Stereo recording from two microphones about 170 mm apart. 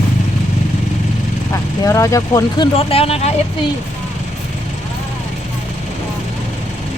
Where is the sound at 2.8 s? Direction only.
35° left (ahead or behind).